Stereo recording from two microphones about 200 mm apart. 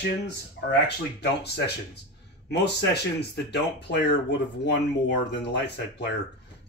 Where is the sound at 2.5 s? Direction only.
55° left (ahead or behind).